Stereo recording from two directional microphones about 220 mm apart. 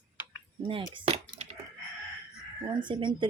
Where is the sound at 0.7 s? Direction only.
25° right (ahead or behind).